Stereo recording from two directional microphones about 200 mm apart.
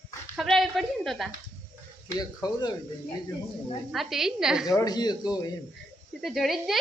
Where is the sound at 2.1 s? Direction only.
20° left (ahead or behind).